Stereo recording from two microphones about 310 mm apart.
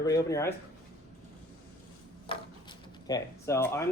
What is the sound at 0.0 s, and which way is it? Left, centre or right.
Speech, centre.